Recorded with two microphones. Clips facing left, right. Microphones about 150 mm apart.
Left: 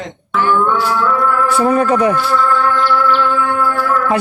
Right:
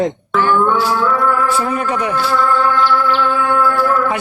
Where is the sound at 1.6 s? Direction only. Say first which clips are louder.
Left 6 dB; 35° left (ahead or behind).